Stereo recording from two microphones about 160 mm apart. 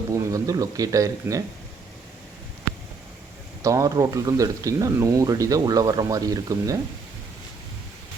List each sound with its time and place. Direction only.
0.1 s speech: 20° right (ahead or behind)
3.6 s speech: 20° right (ahead or behind)